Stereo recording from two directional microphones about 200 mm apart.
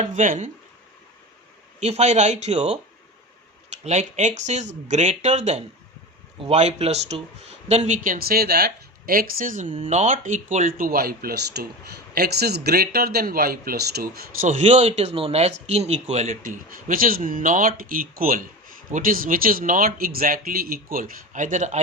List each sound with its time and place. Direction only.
0.0 s speech: 40° right (ahead or behind)
1.8 s speech: 35° right (ahead or behind)
3.8 s speech: 35° right (ahead or behind)